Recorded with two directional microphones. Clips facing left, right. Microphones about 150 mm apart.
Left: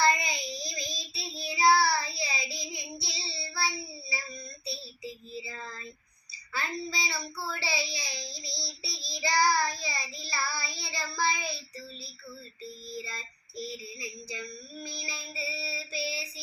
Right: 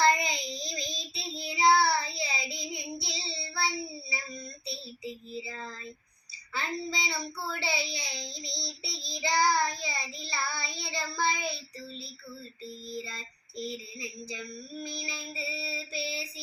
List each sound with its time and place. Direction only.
0.0 s child singing: 20° right (ahead or behind)
5.5 s a sound: 20° right (ahead or behind)
6.5 s child singing: 20° right (ahead or behind)
13.6 s child singing: 20° right (ahead or behind)
14.8 s female singing: 20° right (ahead or behind)